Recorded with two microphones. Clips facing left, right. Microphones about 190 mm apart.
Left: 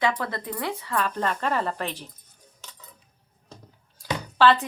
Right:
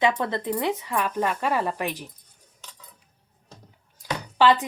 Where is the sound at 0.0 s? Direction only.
20° right (ahead or behind).